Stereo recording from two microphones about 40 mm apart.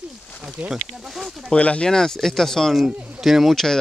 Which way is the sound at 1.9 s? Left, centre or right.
Centre.